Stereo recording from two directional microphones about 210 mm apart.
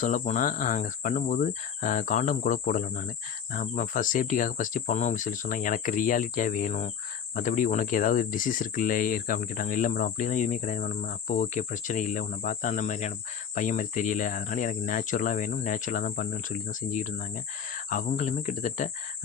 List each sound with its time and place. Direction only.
0.0 s speech: 35° left (ahead or behind)